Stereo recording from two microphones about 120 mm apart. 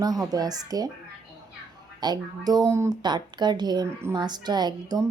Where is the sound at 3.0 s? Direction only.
35° right (ahead or behind).